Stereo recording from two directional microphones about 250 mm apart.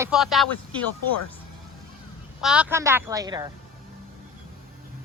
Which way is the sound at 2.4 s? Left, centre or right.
Centre.